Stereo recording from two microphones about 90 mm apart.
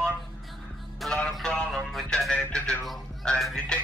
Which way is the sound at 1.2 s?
10° left (ahead or behind).